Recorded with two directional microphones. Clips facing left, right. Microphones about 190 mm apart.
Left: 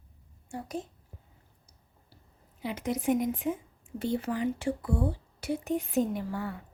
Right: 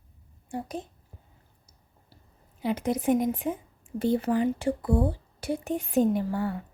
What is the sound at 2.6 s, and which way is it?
A woman's voice, 35° right (ahead or behind).